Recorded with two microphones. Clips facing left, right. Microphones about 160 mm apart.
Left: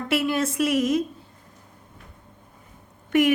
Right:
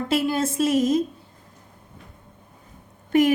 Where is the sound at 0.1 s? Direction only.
30° right (ahead or behind).